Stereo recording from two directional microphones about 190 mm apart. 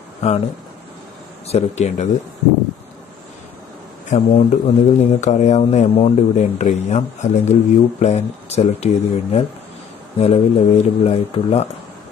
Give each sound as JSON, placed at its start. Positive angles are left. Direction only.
{"t": 0.2, "sound": "speech", "side_deg": 35}
{"t": 1.5, "sound": "speech", "side_deg": 35}
{"t": 4.1, "sound": "speech", "side_deg": 40}